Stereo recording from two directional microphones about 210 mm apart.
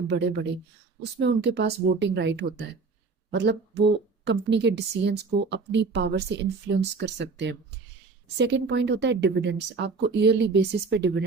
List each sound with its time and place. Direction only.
1.2 s a woman's voice: 55° right (ahead or behind)